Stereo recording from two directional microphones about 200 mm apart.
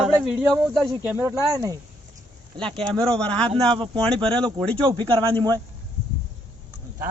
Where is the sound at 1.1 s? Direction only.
15° right (ahead or behind).